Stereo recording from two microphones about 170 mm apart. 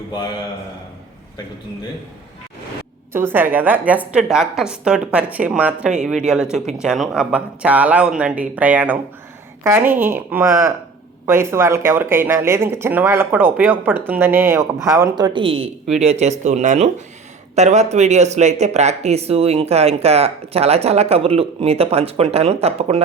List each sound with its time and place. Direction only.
3.1 s speech: 15° right (ahead or behind); by 23.0 s 35° right (ahead or behind)